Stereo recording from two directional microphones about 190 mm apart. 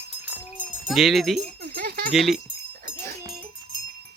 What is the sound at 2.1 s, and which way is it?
Speech, centre (ahead or behind).